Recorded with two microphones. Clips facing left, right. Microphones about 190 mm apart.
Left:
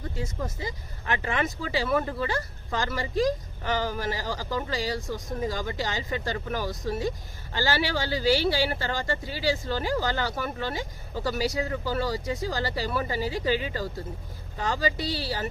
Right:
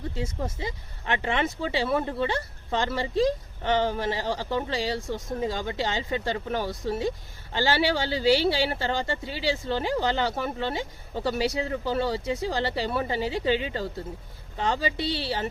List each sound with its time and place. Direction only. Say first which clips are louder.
0.1 s speech: even; 25° right (ahead or behind)